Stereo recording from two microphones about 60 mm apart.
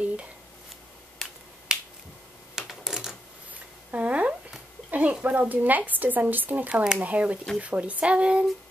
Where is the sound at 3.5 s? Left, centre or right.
Right.